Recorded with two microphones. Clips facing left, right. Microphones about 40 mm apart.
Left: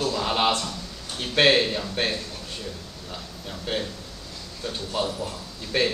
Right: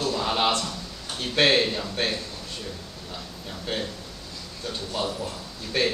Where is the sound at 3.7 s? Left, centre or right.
Centre.